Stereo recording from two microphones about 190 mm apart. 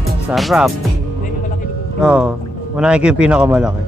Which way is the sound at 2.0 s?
5° right (ahead or behind).